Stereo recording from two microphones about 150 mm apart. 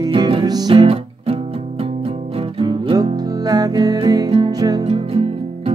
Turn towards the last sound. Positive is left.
turn(degrees=-25)  # may be behind; listen again after turning